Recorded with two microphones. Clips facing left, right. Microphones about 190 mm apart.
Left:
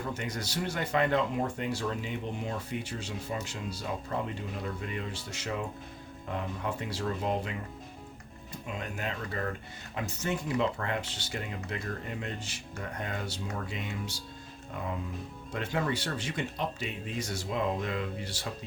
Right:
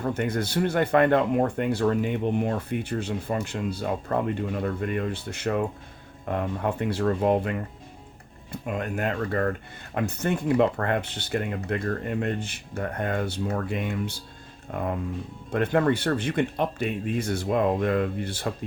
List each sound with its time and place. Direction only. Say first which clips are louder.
0.0 s speech: right 9 dB; 55° right (ahead or behind)
8.6 s speech: right 9 dB; 55° right (ahead or behind)